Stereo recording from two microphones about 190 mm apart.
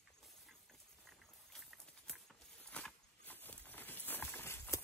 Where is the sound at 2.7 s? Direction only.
5° left (ahead or behind).